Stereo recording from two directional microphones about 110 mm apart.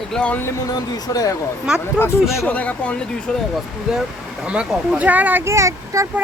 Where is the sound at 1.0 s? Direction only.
35° left (ahead or behind).